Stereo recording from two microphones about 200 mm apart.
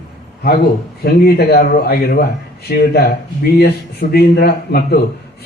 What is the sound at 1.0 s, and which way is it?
A man's voice, 50° left (ahead or behind).